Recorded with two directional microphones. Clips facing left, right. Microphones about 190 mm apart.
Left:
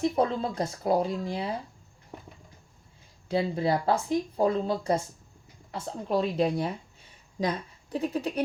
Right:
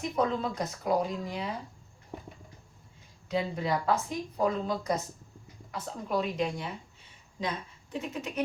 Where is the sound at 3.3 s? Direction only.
30° left (ahead or behind).